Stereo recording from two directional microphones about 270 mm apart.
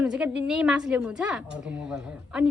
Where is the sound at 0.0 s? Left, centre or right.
Centre.